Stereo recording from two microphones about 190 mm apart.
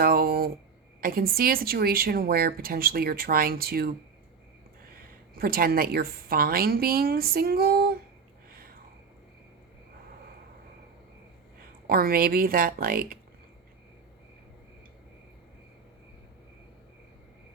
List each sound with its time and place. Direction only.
0.0 s a sound: 50° right (ahead or behind)
1.0 s speech: 50° right (ahead or behind)
5.3 s speech: 50° right (ahead or behind)
11.9 s speech: 50° right (ahead or behind)